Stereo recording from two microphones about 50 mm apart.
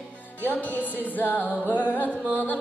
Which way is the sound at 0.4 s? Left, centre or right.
Left.